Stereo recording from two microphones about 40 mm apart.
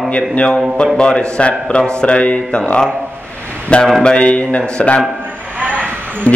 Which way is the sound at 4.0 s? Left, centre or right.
Left.